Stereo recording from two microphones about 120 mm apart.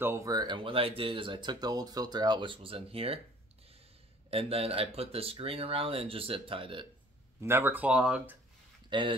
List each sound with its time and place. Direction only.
0.0 s speech: 20° right (ahead or behind)
0.3 s speech: 35° right (ahead or behind); by 3.2 s 50° right (ahead or behind)
4.3 s speech: 55° right (ahead or behind)
7.3 s speech: 20° right (ahead or behind)
8.9 s speech: 40° right (ahead or behind)